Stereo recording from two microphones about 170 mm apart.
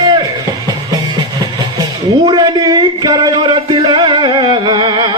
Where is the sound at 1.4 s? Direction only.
25° right (ahead or behind).